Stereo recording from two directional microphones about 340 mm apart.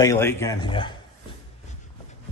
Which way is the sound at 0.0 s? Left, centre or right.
Centre.